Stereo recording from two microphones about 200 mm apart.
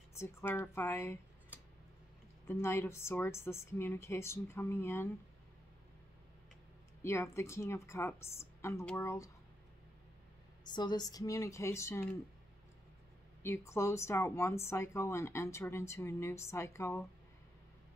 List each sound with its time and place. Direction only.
0.2 s speech: 10° left (ahead or behind)
2.4 s speech: 10° left (ahead or behind)
7.0 s speech: 15° left (ahead or behind)
10.6 s speech: 20° left (ahead or behind)
13.4 s speech: 15° left (ahead or behind)